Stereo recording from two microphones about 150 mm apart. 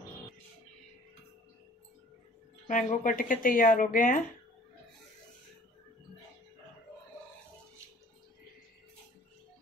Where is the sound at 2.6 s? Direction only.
60° left (ahead or behind).